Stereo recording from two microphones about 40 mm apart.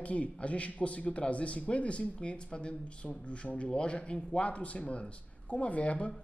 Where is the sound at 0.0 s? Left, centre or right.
Left.